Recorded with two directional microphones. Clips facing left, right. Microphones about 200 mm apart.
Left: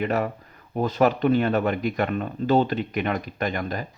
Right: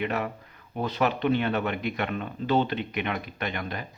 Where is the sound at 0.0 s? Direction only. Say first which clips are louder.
Left 5 dB; 40° left (ahead or behind).